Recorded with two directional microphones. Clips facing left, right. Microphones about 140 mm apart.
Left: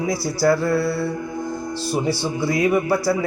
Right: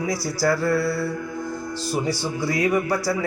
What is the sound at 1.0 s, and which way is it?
Music, 20° left (ahead or behind).